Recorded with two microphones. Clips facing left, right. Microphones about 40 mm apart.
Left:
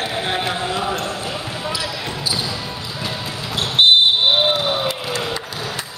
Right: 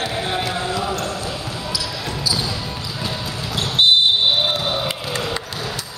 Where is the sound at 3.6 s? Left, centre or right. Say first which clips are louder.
Left 2 dB; left.